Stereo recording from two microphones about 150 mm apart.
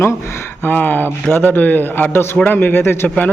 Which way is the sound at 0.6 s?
10° left (ahead or behind).